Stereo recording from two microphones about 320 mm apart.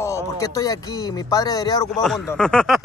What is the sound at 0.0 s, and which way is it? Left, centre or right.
Speech, centre.